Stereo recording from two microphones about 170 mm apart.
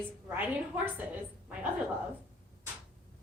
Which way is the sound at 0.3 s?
10° right (ahead or behind).